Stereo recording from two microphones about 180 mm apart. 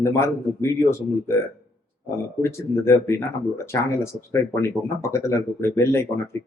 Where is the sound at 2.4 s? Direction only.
15° left (ahead or behind).